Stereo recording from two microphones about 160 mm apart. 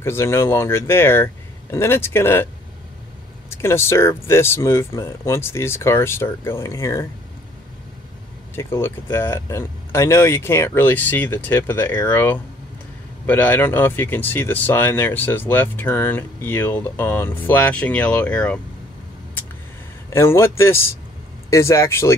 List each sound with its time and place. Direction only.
0.0 s speech: 15° left (ahead or behind)
3.4 s speech: 15° left (ahead or behind)
8.5 s speech: 15° left (ahead or behind)
20.1 s speech: 15° left (ahead or behind)